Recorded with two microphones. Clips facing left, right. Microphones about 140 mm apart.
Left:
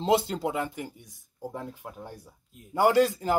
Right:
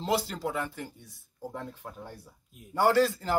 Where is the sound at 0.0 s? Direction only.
20° left (ahead or behind).